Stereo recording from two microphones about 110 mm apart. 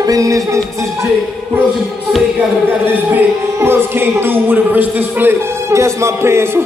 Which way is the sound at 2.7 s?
20° right (ahead or behind).